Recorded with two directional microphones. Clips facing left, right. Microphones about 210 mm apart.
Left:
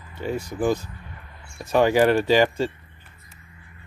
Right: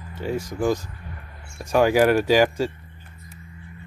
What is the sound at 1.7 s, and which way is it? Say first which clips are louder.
Speech: even; 5° right (ahead or behind).